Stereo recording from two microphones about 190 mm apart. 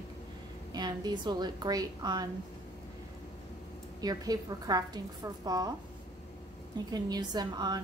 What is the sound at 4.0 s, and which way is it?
A woman's voice, 20° right (ahead or behind).